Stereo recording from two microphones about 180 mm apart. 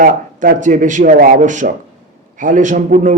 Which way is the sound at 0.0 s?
50° right (ahead or behind).